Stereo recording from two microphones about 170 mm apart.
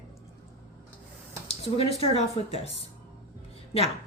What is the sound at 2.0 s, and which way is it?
Speech, 35° left (ahead or behind).